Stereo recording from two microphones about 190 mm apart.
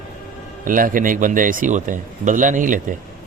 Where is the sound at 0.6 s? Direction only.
45° right (ahead or behind).